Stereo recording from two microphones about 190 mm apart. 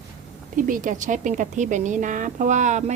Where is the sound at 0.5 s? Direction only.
45° right (ahead or behind).